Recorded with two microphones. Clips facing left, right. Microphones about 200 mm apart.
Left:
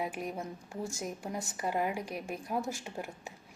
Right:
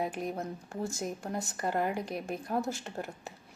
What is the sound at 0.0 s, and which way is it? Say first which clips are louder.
Speech: right 2 dB; 10° left (ahead or behind).